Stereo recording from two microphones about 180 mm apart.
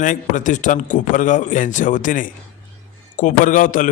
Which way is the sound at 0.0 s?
45° left (ahead or behind).